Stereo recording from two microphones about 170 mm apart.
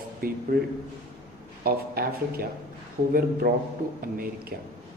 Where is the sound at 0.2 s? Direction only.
60° right (ahead or behind).